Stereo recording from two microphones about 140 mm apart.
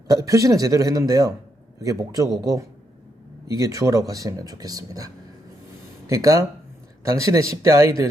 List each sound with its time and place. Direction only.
0.1 s speech: 25° right (ahead or behind)